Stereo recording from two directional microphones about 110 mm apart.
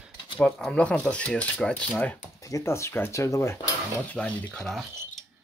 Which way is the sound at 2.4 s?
30° left (ahead or behind).